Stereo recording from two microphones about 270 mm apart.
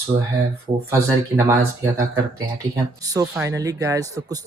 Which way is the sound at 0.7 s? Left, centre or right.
Right.